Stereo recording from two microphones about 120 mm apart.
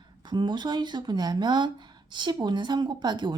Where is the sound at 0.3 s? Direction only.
40° right (ahead or behind).